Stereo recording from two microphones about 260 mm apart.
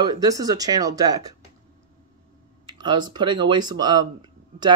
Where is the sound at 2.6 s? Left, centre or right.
Centre.